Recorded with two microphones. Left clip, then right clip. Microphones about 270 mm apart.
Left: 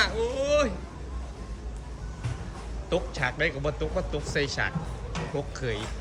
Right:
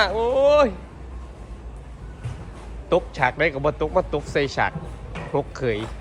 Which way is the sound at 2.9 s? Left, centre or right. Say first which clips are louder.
Right 8 dB; centre.